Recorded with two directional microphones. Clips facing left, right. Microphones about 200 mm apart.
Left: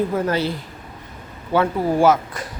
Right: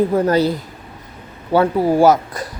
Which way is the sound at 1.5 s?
35° right (ahead or behind).